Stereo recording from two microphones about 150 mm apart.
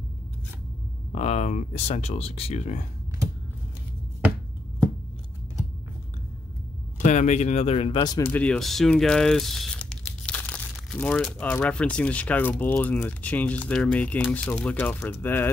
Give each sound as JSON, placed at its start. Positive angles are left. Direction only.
{"t": 1.1, "sound": "speech", "side_deg": 50}
{"t": 7.0, "sound": "speech", "side_deg": 55}
{"t": 8.3, "sound": "speech", "side_deg": 10}